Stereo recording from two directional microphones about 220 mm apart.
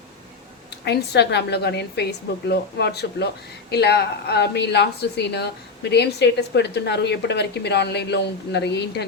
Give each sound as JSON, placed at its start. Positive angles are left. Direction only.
{"t": 0.9, "sound": "a man's voice", "side_deg": 50}